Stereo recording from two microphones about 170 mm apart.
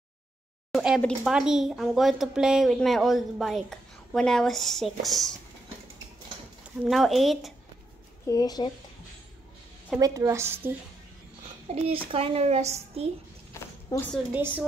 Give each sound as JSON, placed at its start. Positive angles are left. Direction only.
{"t": 0.7, "sound": "speech", "side_deg": 0}
{"t": 6.8, "sound": "speech", "side_deg": 0}
{"t": 8.3, "sound": "speech", "side_deg": 25}
{"t": 9.9, "sound": "a woman's voice", "side_deg": -20}
{"t": 11.7, "sound": "speech", "side_deg": -35}
{"t": 13.9, "sound": "speech", "side_deg": 20}